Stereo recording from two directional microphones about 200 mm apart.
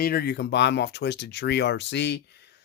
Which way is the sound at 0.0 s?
50° left (ahead or behind).